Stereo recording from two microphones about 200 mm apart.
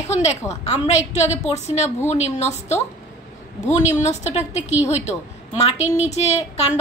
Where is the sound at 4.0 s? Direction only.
35° left (ahead or behind).